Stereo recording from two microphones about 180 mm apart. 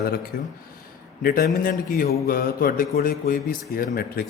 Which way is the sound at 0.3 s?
55° left (ahead or behind).